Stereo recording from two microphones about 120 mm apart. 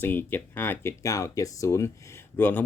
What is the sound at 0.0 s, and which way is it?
Speech, 15° left (ahead or behind).